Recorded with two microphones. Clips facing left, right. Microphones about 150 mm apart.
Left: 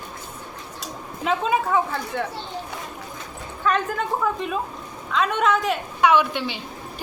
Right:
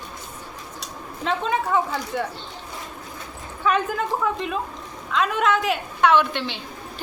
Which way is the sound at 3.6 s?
5° right (ahead or behind).